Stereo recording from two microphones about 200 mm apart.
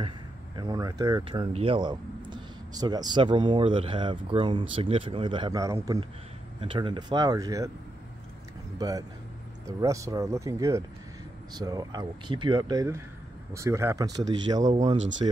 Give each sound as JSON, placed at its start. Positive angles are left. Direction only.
{"t": 0.6, "sound": "speech", "side_deg": -20}
{"t": 8.7, "sound": "speech", "side_deg": -20}